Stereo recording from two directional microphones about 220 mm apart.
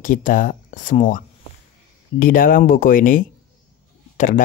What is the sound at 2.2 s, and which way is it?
Speech, 40° left (ahead or behind).